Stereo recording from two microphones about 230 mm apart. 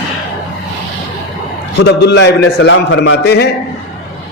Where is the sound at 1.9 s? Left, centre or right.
Left.